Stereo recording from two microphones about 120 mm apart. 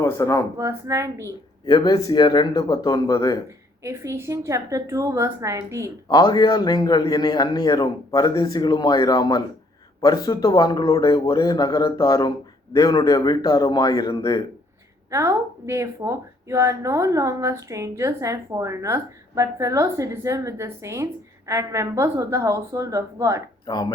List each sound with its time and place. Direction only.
0.0 s speech: 25° left (ahead or behind)
0.5 s a woman's voice: 25° right (ahead or behind)
1.6 s a man's voice: 35° left (ahead or behind)
3.8 s a woman's voice: 25° right (ahead or behind)
6.1 s a man's voice: 35° left (ahead or behind)
15.1 s a woman's voice: 25° right (ahead or behind)
23.6 s speech: 35° left (ahead or behind)